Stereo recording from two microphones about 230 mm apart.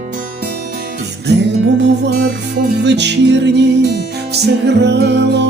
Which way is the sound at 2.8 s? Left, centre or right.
Right.